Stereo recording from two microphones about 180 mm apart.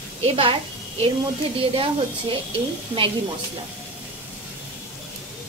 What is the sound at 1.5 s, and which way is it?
Speech, 30° right (ahead or behind).